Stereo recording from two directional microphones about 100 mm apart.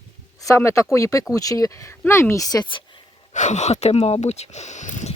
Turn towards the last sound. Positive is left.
turn(degrees=90)